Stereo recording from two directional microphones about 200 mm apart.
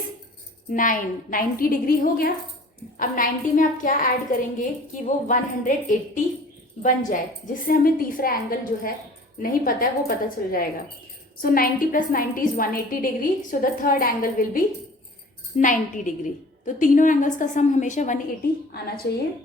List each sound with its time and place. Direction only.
0.7 s a woman's voice: 40° left (ahead or behind)
19.1 s a woman's voice: 50° left (ahead or behind)